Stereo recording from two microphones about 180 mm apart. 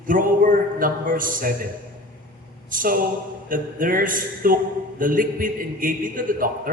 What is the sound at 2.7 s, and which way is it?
A man's voice, 50° right (ahead or behind).